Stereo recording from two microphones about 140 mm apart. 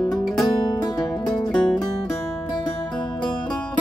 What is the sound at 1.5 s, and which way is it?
Music, 5° left (ahead or behind).